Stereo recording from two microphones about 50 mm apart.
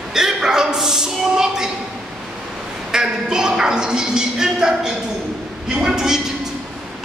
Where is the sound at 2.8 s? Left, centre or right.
Centre.